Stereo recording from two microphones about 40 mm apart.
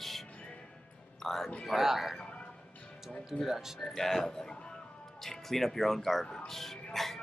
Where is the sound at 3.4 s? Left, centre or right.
Centre.